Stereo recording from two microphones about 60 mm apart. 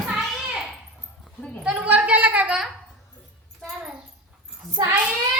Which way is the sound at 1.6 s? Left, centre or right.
Centre.